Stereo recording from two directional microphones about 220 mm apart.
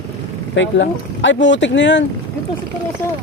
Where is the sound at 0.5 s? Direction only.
55° left (ahead or behind).